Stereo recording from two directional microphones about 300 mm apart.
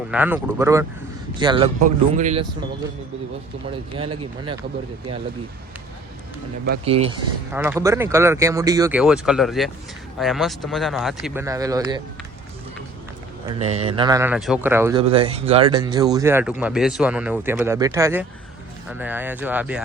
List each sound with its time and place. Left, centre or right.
0.1 s a man's voice: centre; by 2.4 s right
3.7 s speech: centre
6.8 s a man's voice: centre
7.5 s speech: centre
13.6 s speech: right
15.0 s speech: centre